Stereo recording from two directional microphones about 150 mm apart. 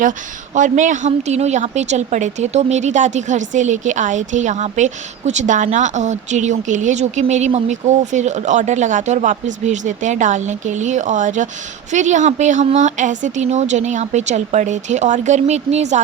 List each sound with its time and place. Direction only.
0.5 s a woman's voice: 55° right (ahead or behind)